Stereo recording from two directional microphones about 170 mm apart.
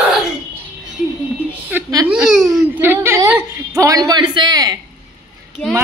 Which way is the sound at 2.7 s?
15° right (ahead or behind).